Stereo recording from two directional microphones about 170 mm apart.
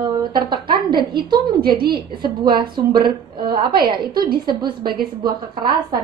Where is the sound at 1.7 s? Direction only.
65° right (ahead or behind).